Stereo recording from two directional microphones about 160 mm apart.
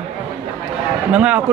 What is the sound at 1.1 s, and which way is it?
Speech, 10° right (ahead or behind).